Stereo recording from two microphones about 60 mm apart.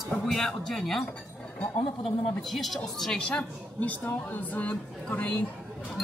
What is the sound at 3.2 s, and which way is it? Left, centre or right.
A woman's voice, left.